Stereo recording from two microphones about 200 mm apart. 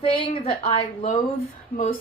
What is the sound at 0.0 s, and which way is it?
Speech, 30° left (ahead or behind).